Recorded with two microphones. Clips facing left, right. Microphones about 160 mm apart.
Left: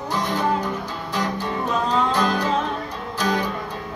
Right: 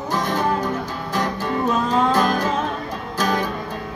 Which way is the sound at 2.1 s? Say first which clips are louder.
Right 2 dB; 45° right (ahead or behind).